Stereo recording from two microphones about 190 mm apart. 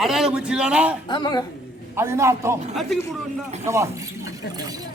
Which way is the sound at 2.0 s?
15° right (ahead or behind).